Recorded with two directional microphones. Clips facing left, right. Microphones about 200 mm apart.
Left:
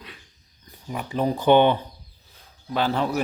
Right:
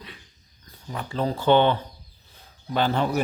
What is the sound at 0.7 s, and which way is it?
Speech, 15° left (ahead or behind).